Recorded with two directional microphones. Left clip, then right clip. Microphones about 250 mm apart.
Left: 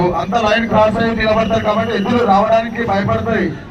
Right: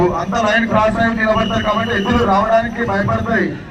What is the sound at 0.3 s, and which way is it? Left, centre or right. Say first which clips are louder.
A man's voice: left 2 dB; centre.